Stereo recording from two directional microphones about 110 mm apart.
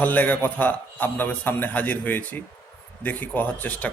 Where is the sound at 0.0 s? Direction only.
15° left (ahead or behind).